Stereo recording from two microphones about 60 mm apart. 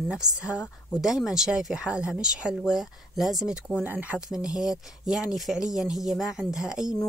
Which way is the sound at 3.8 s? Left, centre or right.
Right.